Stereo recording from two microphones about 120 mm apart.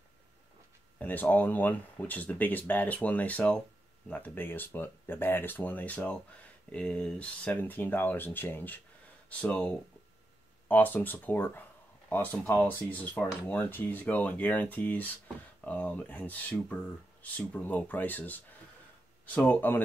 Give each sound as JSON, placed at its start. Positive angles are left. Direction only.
{"t": 0.9, "sound": "speech", "side_deg": 15}